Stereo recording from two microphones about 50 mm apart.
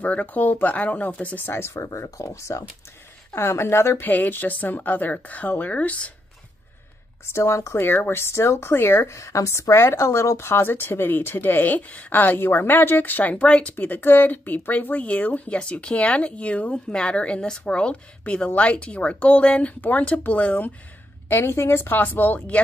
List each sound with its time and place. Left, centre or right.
0.0 s speech: left
1.5 s speech: left
3.3 s a woman's voice: left
4.0 s speech: left
7.3 s speech: left
7.8 s speech: left
9.0 s speech: left
21.3 s speech: left